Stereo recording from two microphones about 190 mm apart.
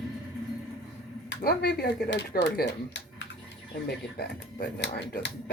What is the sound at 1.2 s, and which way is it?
Speech, 55° left (ahead or behind).